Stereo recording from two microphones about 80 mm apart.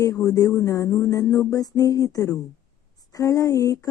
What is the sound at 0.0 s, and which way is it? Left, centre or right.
Speech, left.